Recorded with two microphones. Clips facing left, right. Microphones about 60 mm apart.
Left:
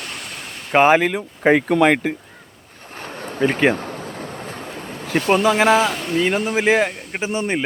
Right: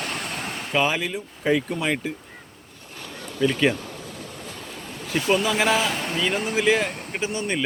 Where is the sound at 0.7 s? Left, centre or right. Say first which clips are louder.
Left 10 dB; left.